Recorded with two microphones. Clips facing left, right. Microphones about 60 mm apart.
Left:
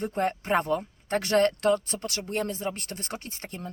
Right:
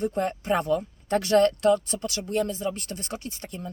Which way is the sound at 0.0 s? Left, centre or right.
Left.